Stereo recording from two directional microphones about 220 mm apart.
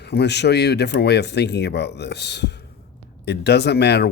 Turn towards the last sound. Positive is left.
turn(degrees=50)  # may be behind; listen again after turning